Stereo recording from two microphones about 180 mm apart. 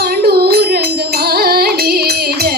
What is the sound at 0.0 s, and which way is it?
Music, 60° right (ahead or behind).